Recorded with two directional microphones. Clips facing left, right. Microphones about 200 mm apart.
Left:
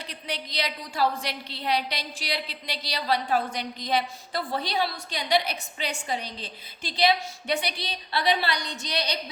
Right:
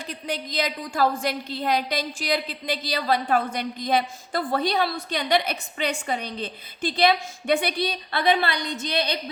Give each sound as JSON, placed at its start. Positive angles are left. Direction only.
{"t": 0.1, "sound": "a woman's voice", "side_deg": -45}